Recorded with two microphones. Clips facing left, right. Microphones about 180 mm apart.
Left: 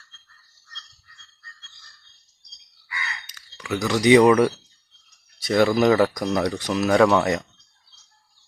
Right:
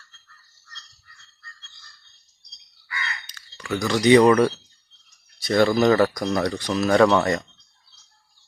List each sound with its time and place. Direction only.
3.3 s speech: 5° left (ahead or behind)
6.4 s speech: 10° left (ahead or behind)